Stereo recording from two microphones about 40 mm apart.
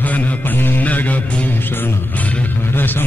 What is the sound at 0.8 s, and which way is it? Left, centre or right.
Music, left.